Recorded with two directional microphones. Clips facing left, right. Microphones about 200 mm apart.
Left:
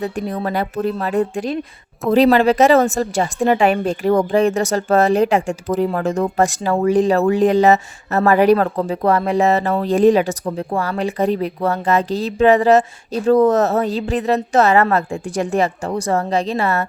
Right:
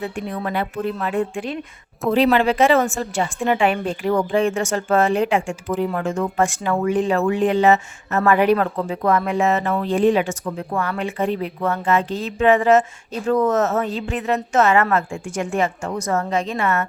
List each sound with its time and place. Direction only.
0.0 s speech: 40° left (ahead or behind)